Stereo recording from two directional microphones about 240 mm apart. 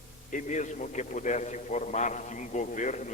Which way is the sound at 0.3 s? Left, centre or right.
Left.